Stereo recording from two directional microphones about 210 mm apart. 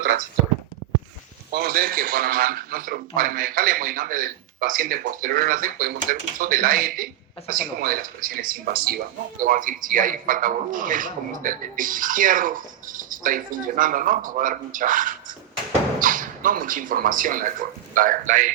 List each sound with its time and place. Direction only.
1.5 s a man's voice: 45° right (ahead or behind)